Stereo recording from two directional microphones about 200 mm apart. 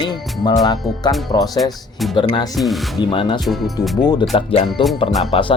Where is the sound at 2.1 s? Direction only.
25° left (ahead or behind).